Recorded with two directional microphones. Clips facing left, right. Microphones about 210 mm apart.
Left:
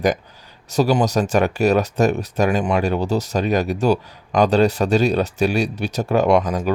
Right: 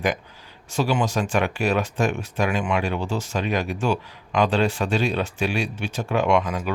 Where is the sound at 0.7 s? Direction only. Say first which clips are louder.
Left 5 dB; 40° left (ahead or behind).